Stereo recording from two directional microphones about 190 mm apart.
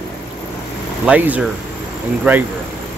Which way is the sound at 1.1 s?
10° right (ahead or behind).